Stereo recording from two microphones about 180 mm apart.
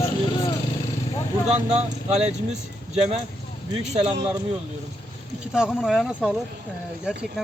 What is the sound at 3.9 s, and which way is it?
Speech, 40° right (ahead or behind).